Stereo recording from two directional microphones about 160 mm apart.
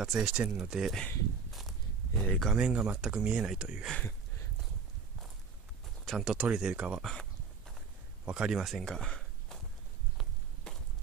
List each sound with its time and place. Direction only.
0.0 s speech: 5° right (ahead or behind)
3.9 s a sound: 10° left (ahead or behind)
6.0 s speech: 5° right (ahead or behind)
8.3 s speech: 5° right (ahead or behind)
10.1 s walk: centre (ahead or behind)